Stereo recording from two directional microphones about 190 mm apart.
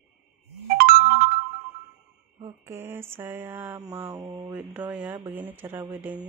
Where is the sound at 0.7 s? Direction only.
50° right (ahead or behind).